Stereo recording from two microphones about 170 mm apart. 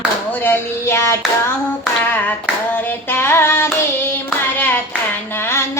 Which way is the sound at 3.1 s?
15° left (ahead or behind).